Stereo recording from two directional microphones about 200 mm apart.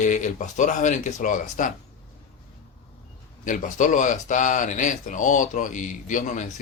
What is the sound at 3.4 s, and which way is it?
Speech, 40° left (ahead or behind).